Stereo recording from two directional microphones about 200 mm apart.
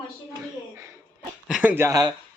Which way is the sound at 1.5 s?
10° right (ahead or behind).